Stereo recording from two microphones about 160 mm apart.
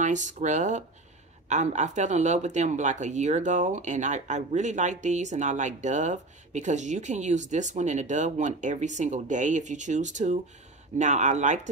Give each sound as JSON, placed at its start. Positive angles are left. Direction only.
{"t": 0.0, "sound": "speech", "side_deg": -50}